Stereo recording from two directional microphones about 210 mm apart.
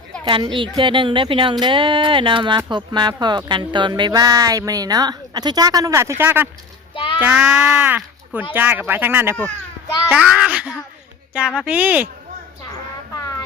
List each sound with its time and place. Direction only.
0.3 s a child's voice: 25° right (ahead or behind); by 12.0 s 5° right (ahead or behind)